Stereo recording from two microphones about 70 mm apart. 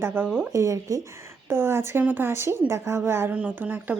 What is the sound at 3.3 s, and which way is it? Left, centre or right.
Speech, right.